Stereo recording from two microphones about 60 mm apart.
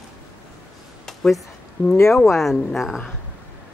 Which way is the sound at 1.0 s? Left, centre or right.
Centre.